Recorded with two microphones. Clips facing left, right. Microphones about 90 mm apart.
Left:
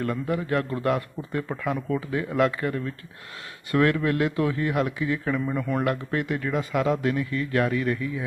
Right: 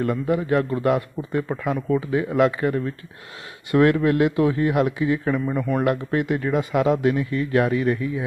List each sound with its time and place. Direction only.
0.0 s a man's voice: 10° right (ahead or behind)